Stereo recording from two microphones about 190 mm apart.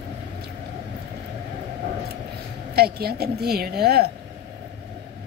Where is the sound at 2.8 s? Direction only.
55° right (ahead or behind).